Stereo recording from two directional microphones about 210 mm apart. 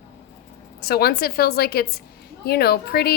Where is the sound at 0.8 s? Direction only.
50° left (ahead or behind).